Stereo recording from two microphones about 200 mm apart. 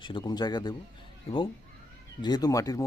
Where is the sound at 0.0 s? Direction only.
25° left (ahead or behind).